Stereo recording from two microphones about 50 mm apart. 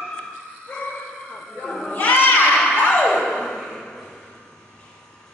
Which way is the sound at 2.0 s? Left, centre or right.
Left.